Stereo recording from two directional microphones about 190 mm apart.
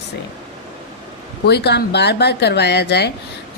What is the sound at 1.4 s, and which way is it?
Speech, 60° left (ahead or behind).